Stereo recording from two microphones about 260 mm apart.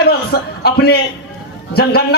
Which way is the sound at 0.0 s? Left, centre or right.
Left.